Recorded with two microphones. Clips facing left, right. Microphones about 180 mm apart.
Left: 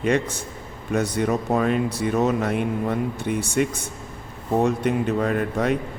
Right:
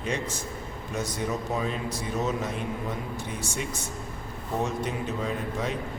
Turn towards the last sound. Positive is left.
turn(degrees=65)  # may be behind; listen again after turning